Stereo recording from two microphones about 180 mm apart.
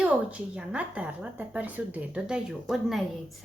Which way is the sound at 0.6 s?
5° right (ahead or behind).